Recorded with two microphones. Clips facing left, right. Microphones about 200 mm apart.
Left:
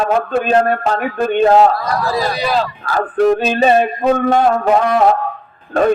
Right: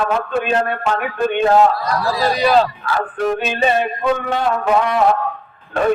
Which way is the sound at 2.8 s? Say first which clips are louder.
Left 6 dB; 40° left (ahead or behind).